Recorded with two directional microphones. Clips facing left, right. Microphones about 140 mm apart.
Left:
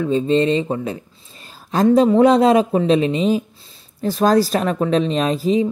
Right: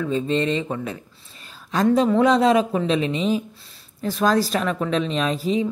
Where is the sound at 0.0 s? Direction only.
30° left (ahead or behind).